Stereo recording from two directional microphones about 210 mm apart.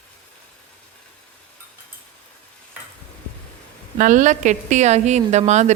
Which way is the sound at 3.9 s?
35° right (ahead or behind).